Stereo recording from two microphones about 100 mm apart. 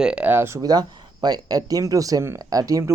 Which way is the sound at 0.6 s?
40° right (ahead or behind).